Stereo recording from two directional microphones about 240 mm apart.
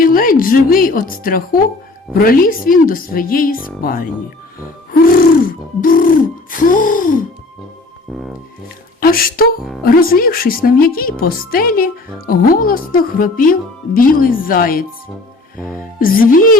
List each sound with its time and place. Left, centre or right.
0.0 s speech: left
5.4 s speech: left
8.1 s speech: centre
9.0 s speech: left
15.5 s speech: centre
16.0 s speech: left